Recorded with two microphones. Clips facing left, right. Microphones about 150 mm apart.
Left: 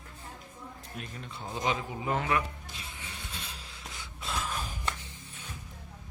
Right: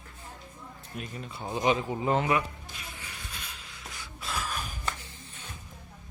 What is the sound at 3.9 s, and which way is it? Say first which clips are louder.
Gasp: even; 20° left (ahead or behind).